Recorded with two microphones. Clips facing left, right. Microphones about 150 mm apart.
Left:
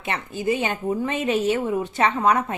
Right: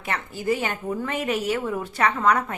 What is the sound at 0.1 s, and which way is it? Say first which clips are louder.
A woman's voice: left 1 dB; 20° left (ahead or behind).